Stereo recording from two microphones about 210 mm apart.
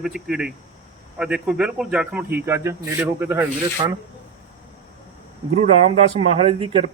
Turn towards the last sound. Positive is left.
turn(degrees=-25)  # may be behind; listen again after turning